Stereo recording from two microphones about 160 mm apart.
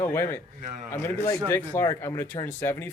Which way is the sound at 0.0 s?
15° left (ahead or behind).